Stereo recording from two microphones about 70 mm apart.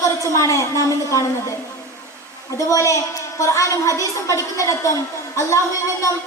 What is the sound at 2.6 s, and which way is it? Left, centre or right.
A woman's voice, left.